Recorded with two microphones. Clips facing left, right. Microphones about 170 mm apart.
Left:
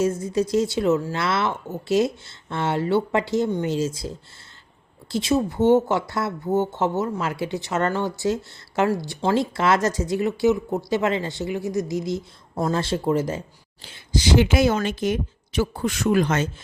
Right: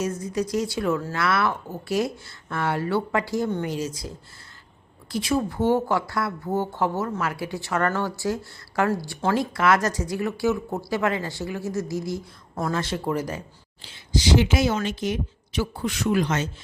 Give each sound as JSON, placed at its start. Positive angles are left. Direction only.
{"t": 0.0, "sound": "speech", "side_deg": 25}
{"t": 13.8, "sound": "speech", "side_deg": 50}